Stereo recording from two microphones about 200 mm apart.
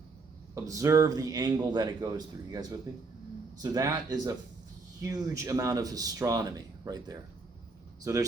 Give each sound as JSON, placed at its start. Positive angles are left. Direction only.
{"t": 0.5, "sound": "speech", "side_deg": -15}